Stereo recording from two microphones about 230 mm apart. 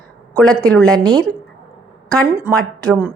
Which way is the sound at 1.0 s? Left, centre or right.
Centre.